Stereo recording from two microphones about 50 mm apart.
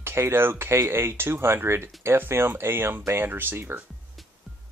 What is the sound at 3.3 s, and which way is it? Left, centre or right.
Speech, right.